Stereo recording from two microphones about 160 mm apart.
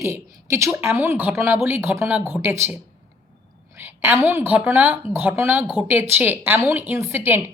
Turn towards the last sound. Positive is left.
turn(degrees=-15)  # may be behind; listen again after turning